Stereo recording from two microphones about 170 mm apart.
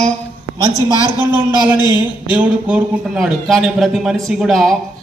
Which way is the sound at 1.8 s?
25° left (ahead or behind).